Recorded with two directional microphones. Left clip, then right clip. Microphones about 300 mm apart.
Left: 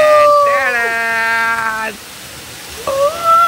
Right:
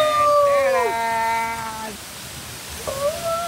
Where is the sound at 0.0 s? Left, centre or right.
Centre.